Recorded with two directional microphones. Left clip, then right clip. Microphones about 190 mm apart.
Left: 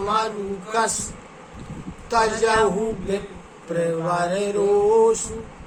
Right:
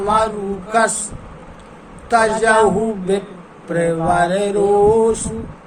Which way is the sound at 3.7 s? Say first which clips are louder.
Right 6 dB; 20° right (ahead or behind).